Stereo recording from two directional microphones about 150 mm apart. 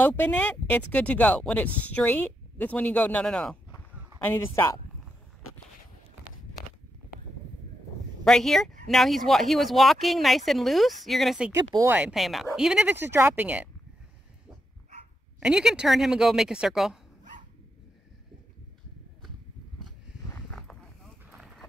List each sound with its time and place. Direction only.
0.0 s speech: 10° left (ahead or behind)
4.2 s speech: 15° left (ahead or behind)
8.2 s speech: 5° left (ahead or behind)
11.5 s speech: 25° right (ahead or behind)
11.9 s speech: 5° right (ahead or behind)
15.4 s speech: 5° right (ahead or behind)
17.2 s dog: 60° right (ahead or behind)
20.5 s clip-clop: centre (ahead or behind)